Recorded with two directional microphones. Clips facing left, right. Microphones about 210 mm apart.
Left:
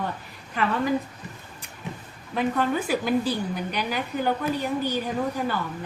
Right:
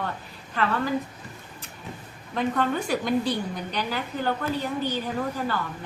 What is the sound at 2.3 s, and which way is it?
A woman's voice, 5° left (ahead or behind).